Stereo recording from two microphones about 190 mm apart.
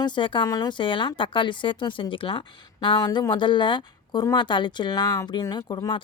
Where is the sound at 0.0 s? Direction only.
25° left (ahead or behind).